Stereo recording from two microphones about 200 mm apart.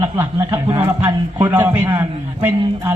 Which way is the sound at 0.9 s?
10° right (ahead or behind).